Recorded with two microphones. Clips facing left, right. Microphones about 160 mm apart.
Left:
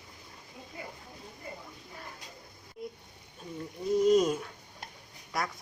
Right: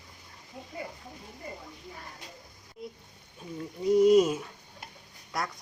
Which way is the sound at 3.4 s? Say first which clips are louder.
Right 5 dB; 5° right (ahead or behind).